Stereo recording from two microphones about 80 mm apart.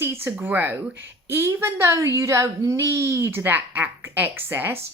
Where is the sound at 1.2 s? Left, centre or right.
Right.